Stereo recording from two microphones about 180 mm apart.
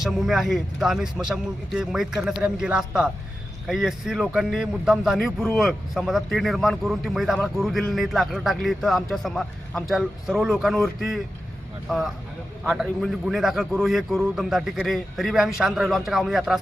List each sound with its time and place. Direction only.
0.0 s a man's voice: centre (ahead or behind)